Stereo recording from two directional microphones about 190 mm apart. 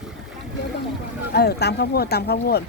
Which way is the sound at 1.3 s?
60° left (ahead or behind).